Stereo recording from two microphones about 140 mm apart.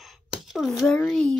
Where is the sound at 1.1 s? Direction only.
5° left (ahead or behind).